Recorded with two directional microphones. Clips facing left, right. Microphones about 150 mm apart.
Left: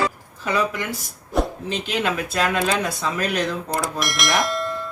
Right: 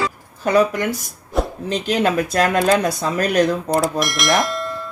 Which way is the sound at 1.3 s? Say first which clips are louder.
Right 1 dB; centre (ahead or behind).